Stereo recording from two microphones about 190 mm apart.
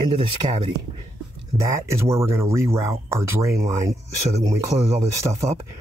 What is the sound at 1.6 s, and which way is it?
Speech, 15° right (ahead or behind).